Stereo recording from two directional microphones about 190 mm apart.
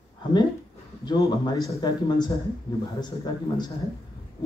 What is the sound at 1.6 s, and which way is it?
Speech, 20° left (ahead or behind).